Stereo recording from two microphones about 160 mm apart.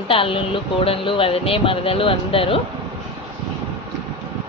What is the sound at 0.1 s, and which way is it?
Speech, 35° left (ahead or behind).